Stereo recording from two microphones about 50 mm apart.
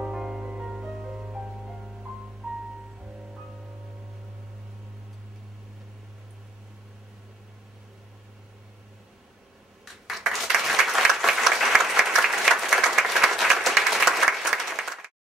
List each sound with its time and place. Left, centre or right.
0.1 s music: centre
1.3 s music: centre
10.0 s applause: centre